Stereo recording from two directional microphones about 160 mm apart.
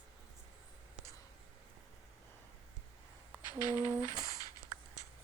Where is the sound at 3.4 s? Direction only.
25° left (ahead or behind).